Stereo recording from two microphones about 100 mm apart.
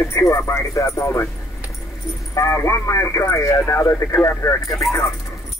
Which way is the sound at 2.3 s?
25° left (ahead or behind).